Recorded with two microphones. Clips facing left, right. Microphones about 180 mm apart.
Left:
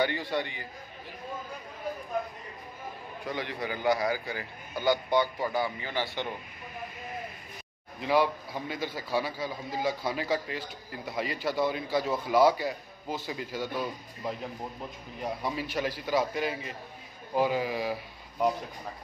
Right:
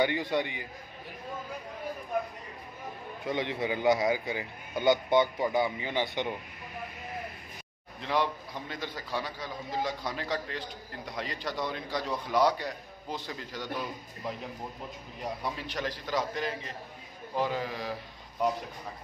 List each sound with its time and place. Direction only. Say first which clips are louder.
0.0 s a man's voice: right 1 dB; 20° right (ahead or behind)
3.3 s a man's voice: right 3 dB; 25° right (ahead or behind)
8.0 s a man's voice: left 4 dB; 5° left (ahead or behind)
15.4 s a man's voice: left 4 dB; 5° left (ahead or behind)